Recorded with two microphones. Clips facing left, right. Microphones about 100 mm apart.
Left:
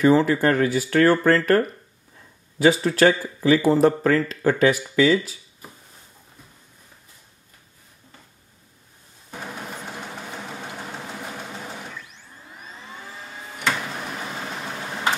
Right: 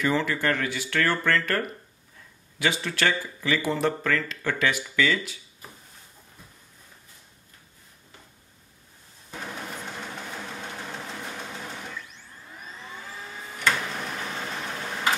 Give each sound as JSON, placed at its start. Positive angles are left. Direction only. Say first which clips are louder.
{"t": 0.0, "sound": "speech", "louder": "left 8 dB", "side_deg": 35}
{"t": 2.6, "sound": "speech", "louder": "left 9 dB", "side_deg": 35}
{"t": 9.4, "sound": "a sound", "louder": "left 2 dB", "side_deg": 5}
{"t": 10.6, "sound": "engine", "louder": "left 2 dB", "side_deg": 5}
{"t": 13.9, "sound": "vehicle", "louder": "left 1 dB", "side_deg": 5}